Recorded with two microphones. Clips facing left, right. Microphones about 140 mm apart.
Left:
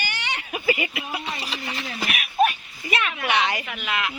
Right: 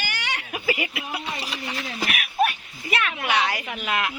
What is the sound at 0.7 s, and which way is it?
Speech, centre (ahead or behind).